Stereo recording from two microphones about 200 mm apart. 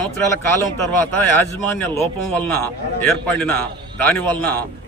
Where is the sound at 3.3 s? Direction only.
10° left (ahead or behind).